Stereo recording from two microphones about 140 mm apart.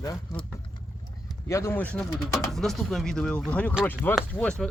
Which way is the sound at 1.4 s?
20° left (ahead or behind).